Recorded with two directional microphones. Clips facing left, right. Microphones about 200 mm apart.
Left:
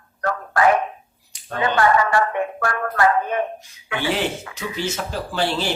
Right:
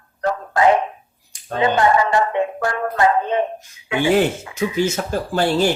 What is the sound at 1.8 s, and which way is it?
Speech, 20° right (ahead or behind).